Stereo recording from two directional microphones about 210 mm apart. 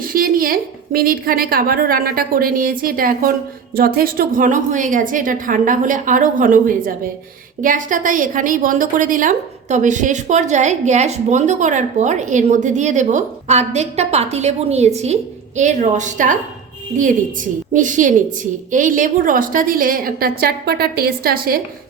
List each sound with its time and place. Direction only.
0.0 s a woman's voice: 45° right (ahead or behind)
17.7 s a woman's voice: 35° right (ahead or behind)